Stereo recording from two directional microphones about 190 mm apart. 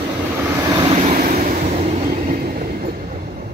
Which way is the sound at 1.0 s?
45° right (ahead or behind).